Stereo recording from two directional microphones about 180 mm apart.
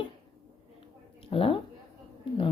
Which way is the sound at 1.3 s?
30° left (ahead or behind).